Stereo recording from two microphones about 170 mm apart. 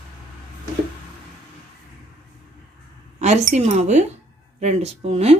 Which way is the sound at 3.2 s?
45° right (ahead or behind).